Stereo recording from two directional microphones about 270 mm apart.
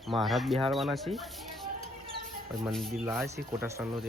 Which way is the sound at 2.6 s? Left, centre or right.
Centre.